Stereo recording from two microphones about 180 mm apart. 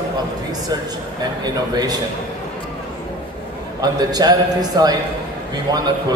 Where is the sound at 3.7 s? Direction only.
20° right (ahead or behind).